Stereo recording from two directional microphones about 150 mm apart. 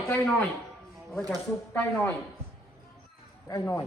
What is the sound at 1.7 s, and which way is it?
Speech, 15° left (ahead or behind).